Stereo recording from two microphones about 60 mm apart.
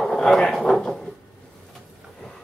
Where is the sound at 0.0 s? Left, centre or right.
Centre.